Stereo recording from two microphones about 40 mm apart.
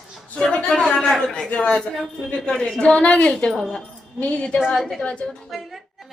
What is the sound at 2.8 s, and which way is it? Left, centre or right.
Speech, left.